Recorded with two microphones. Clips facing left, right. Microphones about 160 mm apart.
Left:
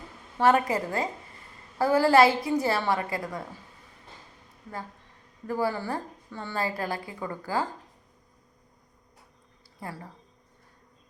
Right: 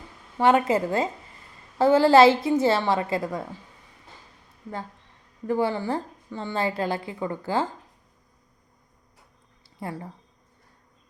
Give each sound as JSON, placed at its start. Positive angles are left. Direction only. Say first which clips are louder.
{"t": 0.3, "sound": "a woman's voice", "louder": "right 3 dB", "side_deg": -20}
{"t": 5.5, "sound": "a woman's voice", "louder": "right 4 dB", "side_deg": -25}